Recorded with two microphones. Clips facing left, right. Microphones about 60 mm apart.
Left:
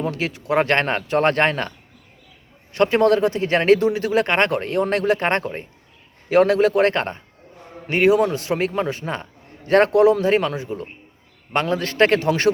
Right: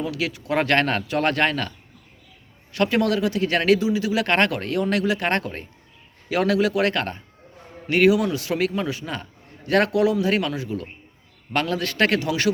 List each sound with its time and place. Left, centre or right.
0.0 s speech: left
2.7 s speech: left
3.8 s speech: left
4.3 s speech: left
5.3 s speech: left